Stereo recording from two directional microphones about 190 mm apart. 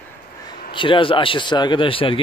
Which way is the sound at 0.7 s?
25° left (ahead or behind).